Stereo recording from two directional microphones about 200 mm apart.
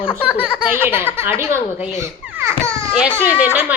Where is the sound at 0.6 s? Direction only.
10° right (ahead or behind).